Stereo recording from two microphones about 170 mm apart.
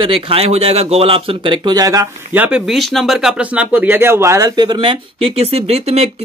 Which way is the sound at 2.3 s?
10° right (ahead or behind).